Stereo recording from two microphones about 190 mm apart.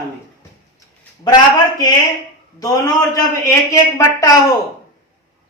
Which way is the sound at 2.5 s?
20° left (ahead or behind).